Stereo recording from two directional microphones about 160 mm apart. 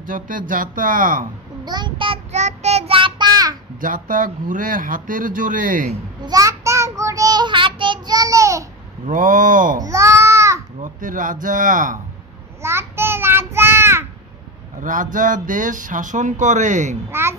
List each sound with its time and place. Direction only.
0.0 s speech: 60° right (ahead or behind)
1.6 s a child's voice: 25° right (ahead or behind)
2.3 s child singing: 45° right (ahead or behind); by 3.5 s 25° right (ahead or behind)
3.8 s speech: 55° right (ahead or behind)
6.2 s child singing: 20° right (ahead or behind)
9.0 s speech: 60° right (ahead or behind)
9.8 s babbling: 20° right (ahead or behind)
10.8 s speech: 55° right (ahead or behind)
12.6 s child singing: 15° right (ahead or behind)
14.8 s speech: 55° right (ahead or behind)
17.1 s a child's voice: 15° right (ahead or behind)